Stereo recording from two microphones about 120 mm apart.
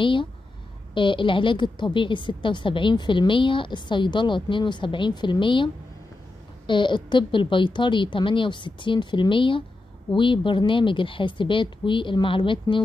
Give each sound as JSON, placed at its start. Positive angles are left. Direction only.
{"t": 0.0, "sound": "a woman's voice", "side_deg": 45}
{"t": 6.7, "sound": "a woman's voice", "side_deg": 40}